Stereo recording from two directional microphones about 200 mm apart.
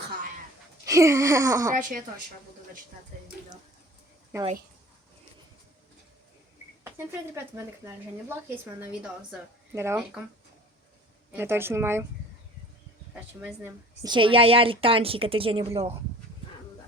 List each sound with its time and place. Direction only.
0.0 s a sound: 50° right (ahead or behind)
0.9 s a woman's voice: 15° right (ahead or behind)
1.7 s a woman's voice: 40° right (ahead or behind)
6.8 s speech: 15° right (ahead or behind)
8.8 s a woman's voice: 5° right (ahead or behind)
11.3 s a woman's voice: 10° right (ahead or behind)
13.1 s a woman's voice: 10° right (ahead or behind)
14.1 s a woman's voice: 25° right (ahead or behind)